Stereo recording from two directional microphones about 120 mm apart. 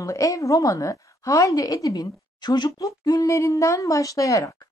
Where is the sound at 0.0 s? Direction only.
25° left (ahead or behind).